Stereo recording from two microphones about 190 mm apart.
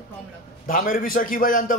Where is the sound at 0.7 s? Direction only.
45° left (ahead or behind).